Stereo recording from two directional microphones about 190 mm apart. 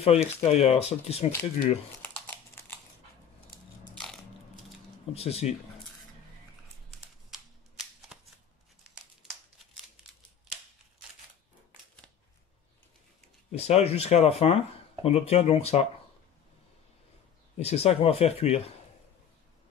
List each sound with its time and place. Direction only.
0.0 s speech: 35° left (ahead or behind)
2.0 s crumpling: 10° left (ahead or behind)
3.9 s biting: 5° left (ahead or behind)
5.1 s speech: 35° left (ahead or behind)
7.0 s typing: 5° right (ahead or behind)
13.5 s speech: 35° left (ahead or behind)
17.6 s speech: 35° left (ahead or behind)